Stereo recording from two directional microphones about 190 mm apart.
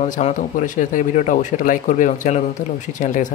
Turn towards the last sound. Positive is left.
turn(degrees=40)  # may be behind; listen again after turning